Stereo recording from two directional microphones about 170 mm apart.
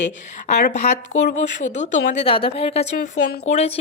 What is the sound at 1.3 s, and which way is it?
Speech, 45° left (ahead or behind).